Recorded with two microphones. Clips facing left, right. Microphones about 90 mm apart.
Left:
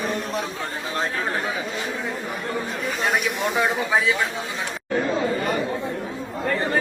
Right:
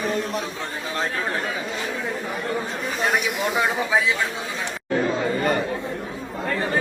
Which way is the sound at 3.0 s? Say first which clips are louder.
Right 1 dB; centre (ahead or behind).